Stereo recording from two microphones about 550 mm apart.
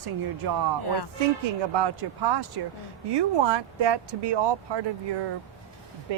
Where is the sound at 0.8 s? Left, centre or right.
Left.